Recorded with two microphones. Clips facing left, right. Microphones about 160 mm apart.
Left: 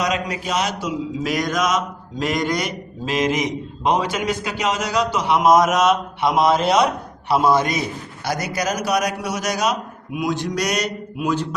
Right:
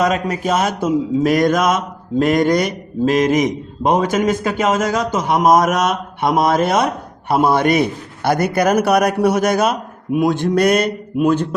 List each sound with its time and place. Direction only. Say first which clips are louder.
0.0 s mantra: right 6 dB; 50° right (ahead or behind)